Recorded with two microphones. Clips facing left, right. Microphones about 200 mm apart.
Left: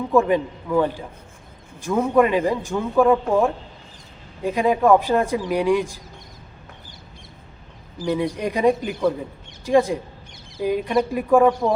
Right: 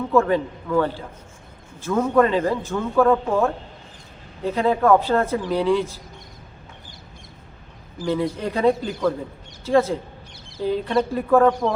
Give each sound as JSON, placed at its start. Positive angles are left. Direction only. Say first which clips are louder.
{"t": 0.1, "sound": "a man's voice", "louder": "left 1 dB", "side_deg": 15}
{"t": 8.0, "sound": "a man's voice", "louder": "left 1 dB", "side_deg": 15}